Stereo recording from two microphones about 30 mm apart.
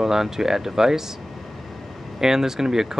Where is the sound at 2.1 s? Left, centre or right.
Centre.